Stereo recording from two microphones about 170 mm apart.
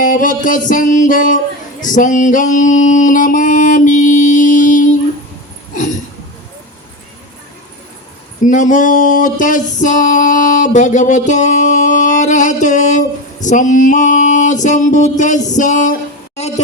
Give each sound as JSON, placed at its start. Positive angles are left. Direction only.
{"t": 0.0, "sound": "music", "side_deg": 55}
{"t": 8.4, "sound": "music", "side_deg": 50}